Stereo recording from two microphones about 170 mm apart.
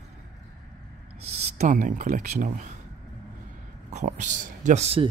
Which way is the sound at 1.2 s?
40° right (ahead or behind).